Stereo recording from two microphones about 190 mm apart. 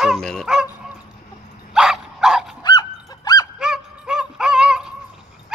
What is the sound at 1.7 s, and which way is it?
Bow-wow, centre (ahead or behind).